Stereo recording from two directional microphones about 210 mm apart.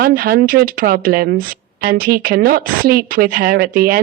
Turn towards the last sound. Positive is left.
turn(degrees=-45)  # may be behind; listen again after turning